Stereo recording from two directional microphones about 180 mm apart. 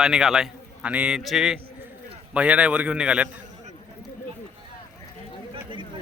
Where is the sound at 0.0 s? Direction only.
5° right (ahead or behind).